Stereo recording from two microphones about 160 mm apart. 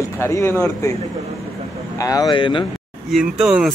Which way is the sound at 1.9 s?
20° left (ahead or behind).